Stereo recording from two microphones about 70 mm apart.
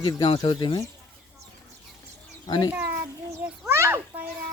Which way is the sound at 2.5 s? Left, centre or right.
Left.